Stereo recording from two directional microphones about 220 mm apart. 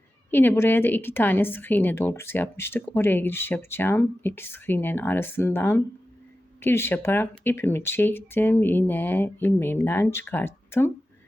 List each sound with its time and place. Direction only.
0.3 s a woman's voice: 10° left (ahead or behind)